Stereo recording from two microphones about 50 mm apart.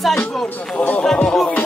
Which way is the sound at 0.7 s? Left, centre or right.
Left.